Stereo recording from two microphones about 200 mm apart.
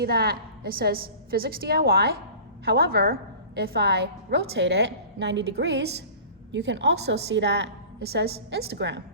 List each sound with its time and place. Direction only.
0.0 s a woman's voice: 50° right (ahead or behind)